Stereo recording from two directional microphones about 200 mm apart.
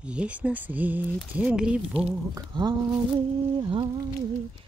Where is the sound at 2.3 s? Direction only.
20° right (ahead or behind).